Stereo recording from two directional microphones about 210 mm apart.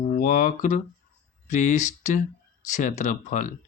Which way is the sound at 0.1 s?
40° left (ahead or behind).